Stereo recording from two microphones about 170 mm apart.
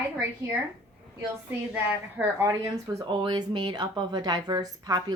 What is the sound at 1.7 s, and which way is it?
A woman's voice, 10° right (ahead or behind).